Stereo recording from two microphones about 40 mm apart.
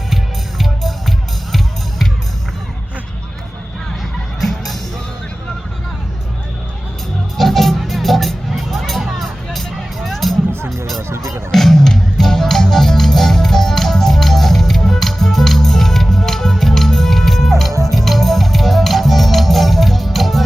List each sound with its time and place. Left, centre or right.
0.6 s music: centre
4.4 s music: centre
7.3 s music: centre
11.1 s music: right
11.5 s music: centre